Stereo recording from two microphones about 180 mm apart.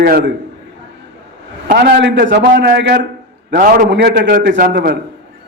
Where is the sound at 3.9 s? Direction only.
70° right (ahead or behind).